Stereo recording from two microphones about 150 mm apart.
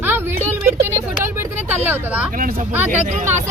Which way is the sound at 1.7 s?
10° right (ahead or behind).